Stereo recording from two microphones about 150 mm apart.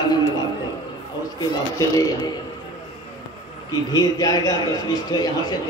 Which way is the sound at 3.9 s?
25° left (ahead or behind).